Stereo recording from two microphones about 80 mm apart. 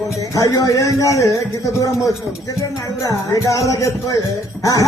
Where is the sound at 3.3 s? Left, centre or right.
Left.